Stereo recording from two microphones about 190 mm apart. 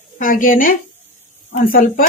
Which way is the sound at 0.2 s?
45° left (ahead or behind).